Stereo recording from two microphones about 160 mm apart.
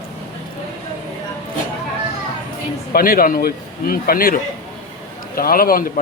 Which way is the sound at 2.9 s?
65° left (ahead or behind).